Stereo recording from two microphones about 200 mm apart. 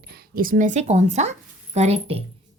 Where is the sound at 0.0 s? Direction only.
50° right (ahead or behind).